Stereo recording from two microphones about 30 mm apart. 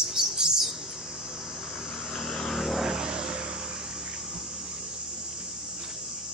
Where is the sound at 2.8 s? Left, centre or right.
Right.